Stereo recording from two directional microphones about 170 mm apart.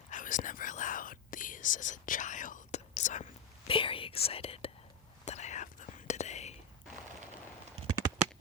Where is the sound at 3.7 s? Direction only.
30° left (ahead or behind).